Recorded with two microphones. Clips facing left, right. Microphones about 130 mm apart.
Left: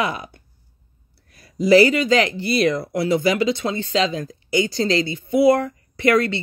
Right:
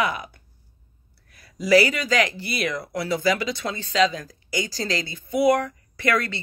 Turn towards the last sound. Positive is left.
turn(degrees=25)  # may be behind; listen again after turning